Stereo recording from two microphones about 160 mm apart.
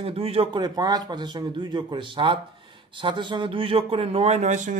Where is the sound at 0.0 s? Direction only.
40° right (ahead or behind).